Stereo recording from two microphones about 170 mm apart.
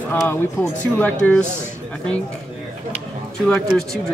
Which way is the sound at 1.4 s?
15° right (ahead or behind).